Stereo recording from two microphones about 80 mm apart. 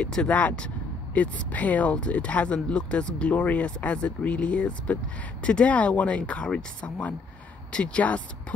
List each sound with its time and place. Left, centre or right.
0.0 s speech: centre